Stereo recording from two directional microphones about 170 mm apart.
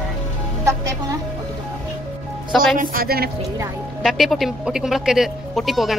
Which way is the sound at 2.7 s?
60° right (ahead or behind).